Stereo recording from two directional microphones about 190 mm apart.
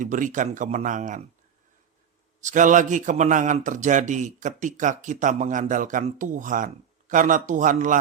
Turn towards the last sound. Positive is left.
turn(degrees=-45)  # may be behind; listen again after turning